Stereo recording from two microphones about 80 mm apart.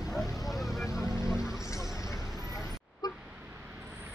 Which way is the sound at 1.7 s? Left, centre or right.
Left.